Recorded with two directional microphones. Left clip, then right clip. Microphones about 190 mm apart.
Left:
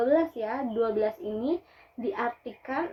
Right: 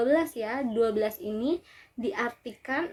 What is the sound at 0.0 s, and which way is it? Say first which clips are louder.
Speech: left 1 dB; 45° right (ahead or behind).